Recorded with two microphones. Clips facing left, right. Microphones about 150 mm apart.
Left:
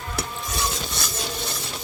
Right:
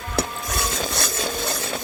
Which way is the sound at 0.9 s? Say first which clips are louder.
Right 4 dB; 55° right (ahead or behind).